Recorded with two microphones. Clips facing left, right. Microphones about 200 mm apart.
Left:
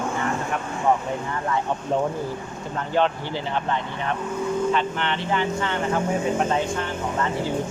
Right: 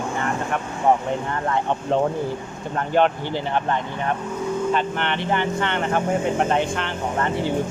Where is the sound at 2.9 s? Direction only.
55° right (ahead or behind).